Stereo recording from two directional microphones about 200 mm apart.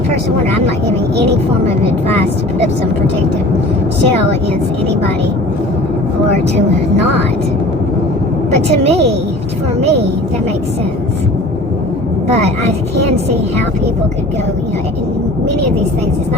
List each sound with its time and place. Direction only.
8.7 s a woman's voice: 30° right (ahead or behind)